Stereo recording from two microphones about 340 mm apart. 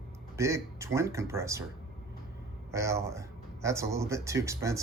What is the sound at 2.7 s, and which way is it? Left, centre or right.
A man's voice, centre.